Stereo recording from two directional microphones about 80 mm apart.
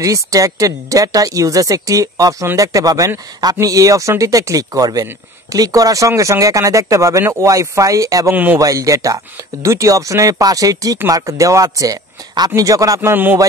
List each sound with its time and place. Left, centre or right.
0.0 s speech: right
8.3 s a man's voice: right
8.5 s speech: right
13.0 s a man's voice: right